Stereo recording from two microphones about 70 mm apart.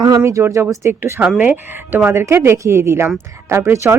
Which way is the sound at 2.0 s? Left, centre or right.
Right.